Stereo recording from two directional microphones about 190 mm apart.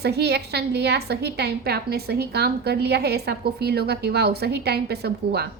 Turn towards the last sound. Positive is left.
turn(degrees=-60)  # may be behind; listen again after turning